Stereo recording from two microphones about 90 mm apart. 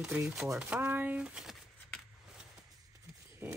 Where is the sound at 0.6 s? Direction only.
20° right (ahead or behind).